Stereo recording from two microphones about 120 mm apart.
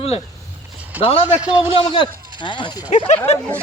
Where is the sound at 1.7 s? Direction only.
45° left (ahead or behind).